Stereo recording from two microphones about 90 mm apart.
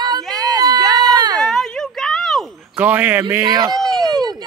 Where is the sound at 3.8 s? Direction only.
50° right (ahead or behind).